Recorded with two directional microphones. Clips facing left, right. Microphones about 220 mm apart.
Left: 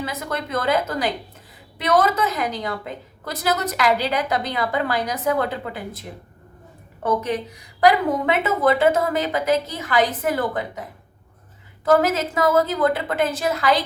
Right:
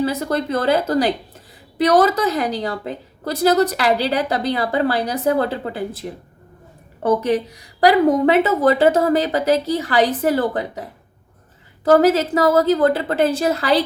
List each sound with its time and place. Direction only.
0.0 s a woman's voice: 35° right (ahead or behind)
11.9 s a woman's voice: 35° right (ahead or behind)